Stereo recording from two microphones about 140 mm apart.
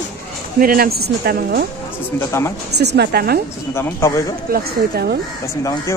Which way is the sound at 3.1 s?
90° right.